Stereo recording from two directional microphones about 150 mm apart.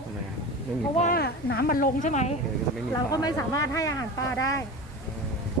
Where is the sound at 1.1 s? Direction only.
90° left; by 2.4 s 50° left (ahead or behind).